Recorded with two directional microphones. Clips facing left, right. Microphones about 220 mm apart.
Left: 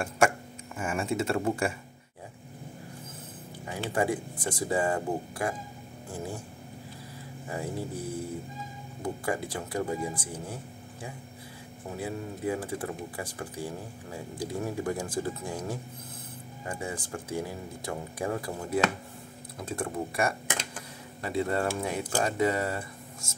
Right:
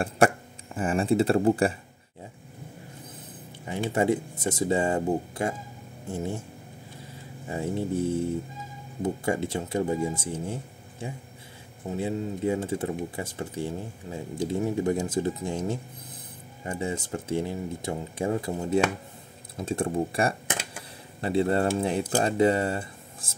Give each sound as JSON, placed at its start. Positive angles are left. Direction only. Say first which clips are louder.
{"t": 0.7, "sound": "speech", "louder": "right 7 dB", "side_deg": -35}
{"t": 3.6, "sound": "speech", "louder": "right 4 dB", "side_deg": -25}
{"t": 7.4, "sound": "speech", "louder": "right 5 dB", "side_deg": -25}